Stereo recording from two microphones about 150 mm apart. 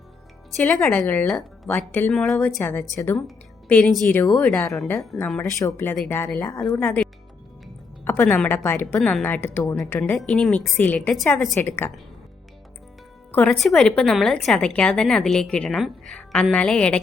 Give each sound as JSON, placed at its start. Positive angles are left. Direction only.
{"t": 0.6, "sound": "speech", "side_deg": 10}
{"t": 3.2, "sound": "music", "side_deg": 5}
{"t": 4.1, "sound": "speech", "side_deg": 10}
{"t": 5.1, "sound": "a woman's voice", "side_deg": 0}
{"t": 5.5, "sound": "speech", "side_deg": 20}
{"t": 6.5, "sound": "speech", "side_deg": 25}
{"t": 6.7, "sound": "speech", "side_deg": 10}
{"t": 9.0, "sound": "a woman's voice", "side_deg": 0}
{"t": 9.2, "sound": "speech", "side_deg": 15}
{"t": 10.0, "sound": "a woman's voice", "side_deg": 5}
{"t": 11.8, "sound": "speech", "side_deg": 15}
{"t": 13.3, "sound": "a woman's voice", "side_deg": 10}